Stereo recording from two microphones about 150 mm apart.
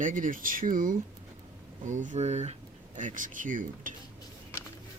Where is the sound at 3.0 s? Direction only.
60° right (ahead or behind).